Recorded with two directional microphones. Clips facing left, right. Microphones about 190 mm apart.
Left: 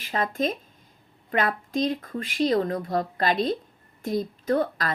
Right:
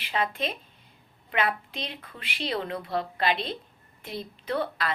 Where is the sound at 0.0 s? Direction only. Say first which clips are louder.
Left 3 dB; 45° left (ahead or behind).